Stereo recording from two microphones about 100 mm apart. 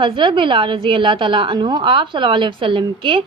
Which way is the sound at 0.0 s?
60° right (ahead or behind).